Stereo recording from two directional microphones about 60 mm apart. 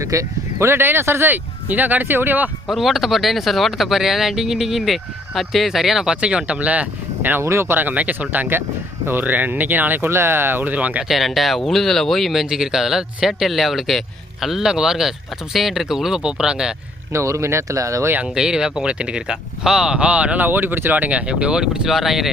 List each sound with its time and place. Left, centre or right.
0.0 s speech: right
0.7 s speech: right
2.6 s speech: centre
6.1 s speech: centre; by 7.4 s right
7.4 s speech: right
11.1 s speech: centre
17.1 s speech: right
18.3 s speech: centre